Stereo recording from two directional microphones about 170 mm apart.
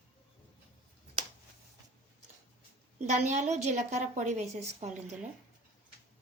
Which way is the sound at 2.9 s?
45° right (ahead or behind).